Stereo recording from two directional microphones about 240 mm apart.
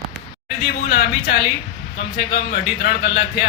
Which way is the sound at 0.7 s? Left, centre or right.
Left.